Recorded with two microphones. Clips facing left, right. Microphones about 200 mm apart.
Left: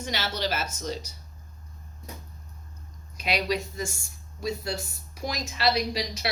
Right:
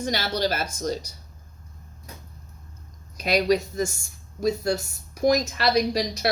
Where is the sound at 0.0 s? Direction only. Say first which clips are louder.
Right 5 dB; 40° right (ahead or behind).